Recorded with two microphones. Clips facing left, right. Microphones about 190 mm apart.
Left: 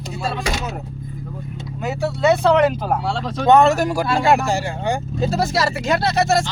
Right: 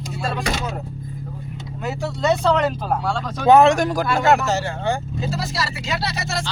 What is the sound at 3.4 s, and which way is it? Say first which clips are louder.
Speech: even; 10° right (ahead or behind).